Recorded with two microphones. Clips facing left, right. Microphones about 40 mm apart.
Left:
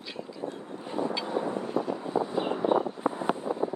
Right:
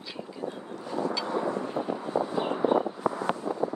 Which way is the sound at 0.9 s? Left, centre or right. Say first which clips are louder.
Right 1 dB; left.